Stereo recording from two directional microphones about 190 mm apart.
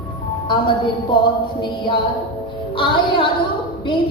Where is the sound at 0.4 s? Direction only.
25° left (ahead or behind).